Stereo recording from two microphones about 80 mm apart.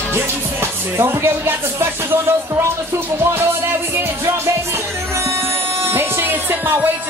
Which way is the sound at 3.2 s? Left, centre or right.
Right.